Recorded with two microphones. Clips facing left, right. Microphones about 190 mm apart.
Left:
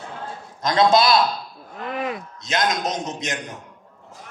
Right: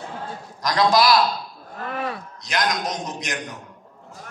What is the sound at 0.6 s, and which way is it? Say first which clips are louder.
A man's voice: left 2 dB; 25° left (ahead or behind).